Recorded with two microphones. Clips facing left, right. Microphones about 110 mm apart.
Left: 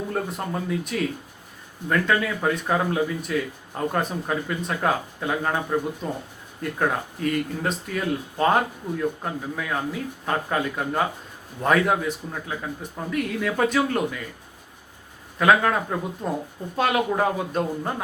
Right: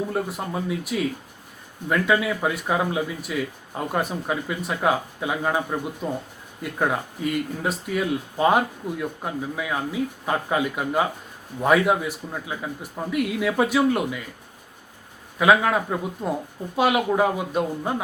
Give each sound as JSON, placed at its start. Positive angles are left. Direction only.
{"t": 0.1, "sound": "speech", "side_deg": -5}
{"t": 15.4, "sound": "speech", "side_deg": -5}